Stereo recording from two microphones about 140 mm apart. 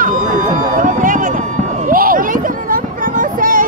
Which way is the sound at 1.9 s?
90° right.